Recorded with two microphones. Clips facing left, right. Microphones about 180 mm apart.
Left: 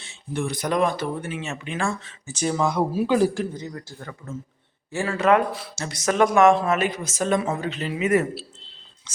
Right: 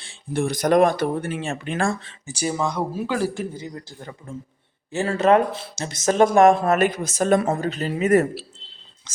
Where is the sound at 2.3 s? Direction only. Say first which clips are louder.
Left 1 dB; 10° right (ahead or behind).